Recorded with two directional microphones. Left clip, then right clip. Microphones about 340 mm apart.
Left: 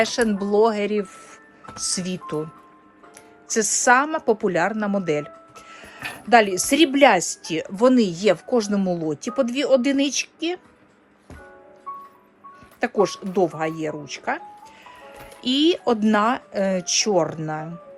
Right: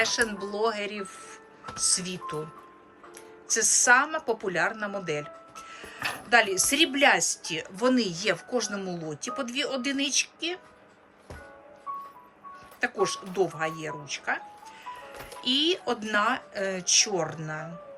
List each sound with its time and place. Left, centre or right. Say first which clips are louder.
0.0 s speech: left 5 dB; centre
3.5 s a woman's voice: left 4 dB; centre
12.8 s speech: left 6 dB; centre